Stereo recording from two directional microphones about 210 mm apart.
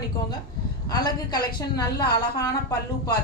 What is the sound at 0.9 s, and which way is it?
Speech, 20° left (ahead or behind).